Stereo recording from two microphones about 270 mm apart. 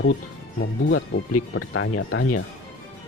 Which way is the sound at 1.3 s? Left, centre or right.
Left.